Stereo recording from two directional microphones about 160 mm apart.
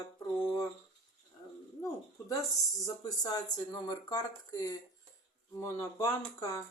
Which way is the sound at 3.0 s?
25° left (ahead or behind).